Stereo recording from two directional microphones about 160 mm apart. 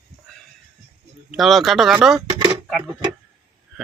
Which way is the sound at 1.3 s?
Centre (ahead or behind).